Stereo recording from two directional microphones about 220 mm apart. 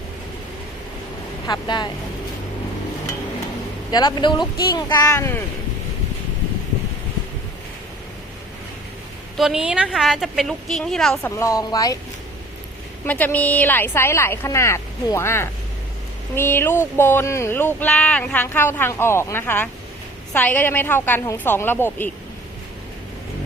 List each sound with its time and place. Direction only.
1.5 s speech: 20° left (ahead or behind)
3.9 s speech: 20° left (ahead or behind)
9.4 s a woman's voice: 5° right (ahead or behind)
11.3 s speech: 15° left (ahead or behind)
13.1 s speech: 10° left (ahead or behind)